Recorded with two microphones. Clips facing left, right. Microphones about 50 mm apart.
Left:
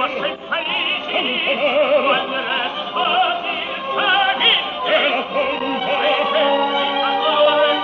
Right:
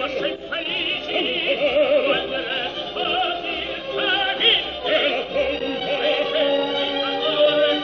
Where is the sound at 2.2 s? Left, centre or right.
Left.